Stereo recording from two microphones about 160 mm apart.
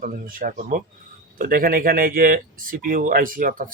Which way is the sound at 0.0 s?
60° right (ahead or behind).